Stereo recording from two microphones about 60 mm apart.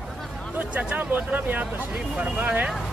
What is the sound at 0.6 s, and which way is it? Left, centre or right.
Speech, right.